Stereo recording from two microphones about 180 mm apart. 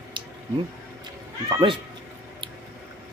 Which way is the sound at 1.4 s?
25° right (ahead or behind).